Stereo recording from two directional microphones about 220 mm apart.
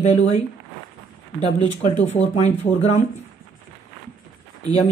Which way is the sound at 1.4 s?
30° left (ahead or behind).